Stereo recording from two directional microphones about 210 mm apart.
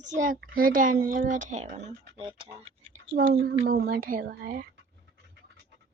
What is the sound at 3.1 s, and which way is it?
Speech, 50° right (ahead or behind).